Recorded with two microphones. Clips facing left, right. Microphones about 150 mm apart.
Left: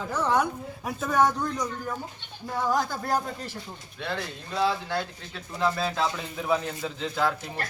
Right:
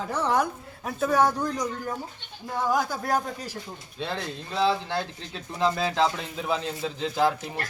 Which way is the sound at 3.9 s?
25° right (ahead or behind).